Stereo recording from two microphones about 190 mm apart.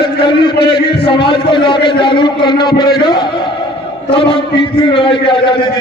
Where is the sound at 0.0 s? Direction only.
25° left (ahead or behind).